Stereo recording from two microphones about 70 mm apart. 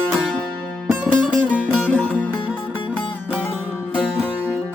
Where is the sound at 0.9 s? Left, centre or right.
Centre.